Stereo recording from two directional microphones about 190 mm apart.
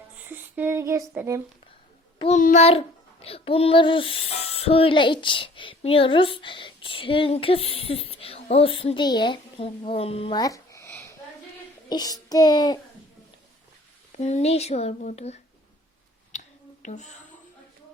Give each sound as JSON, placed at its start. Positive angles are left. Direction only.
{"t": 0.3, "sound": "female singing", "side_deg": -10}
{"t": 2.1, "sound": "a child's voice", "side_deg": 30}
{"t": 11.9, "sound": "child singing", "side_deg": 20}
{"t": 14.1, "sound": "speech", "side_deg": 35}
{"t": 16.3, "sound": "whispering", "side_deg": 40}